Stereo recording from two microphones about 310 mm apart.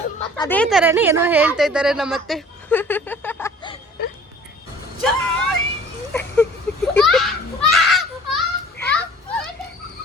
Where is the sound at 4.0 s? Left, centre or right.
Left.